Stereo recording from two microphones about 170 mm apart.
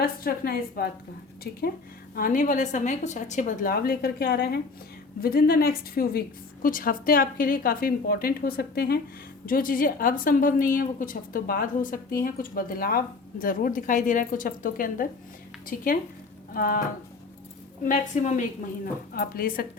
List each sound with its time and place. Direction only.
0.0 s a woman's voice: 60° left (ahead or behind)
2.1 s a woman's voice: 55° left (ahead or behind)
17.8 s a woman's voice: 45° left (ahead or behind)
19.1 s a woman's voice: 60° left (ahead or behind)